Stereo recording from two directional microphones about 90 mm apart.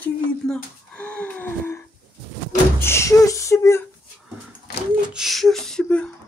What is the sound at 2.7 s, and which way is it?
Speech, 30° left (ahead or behind).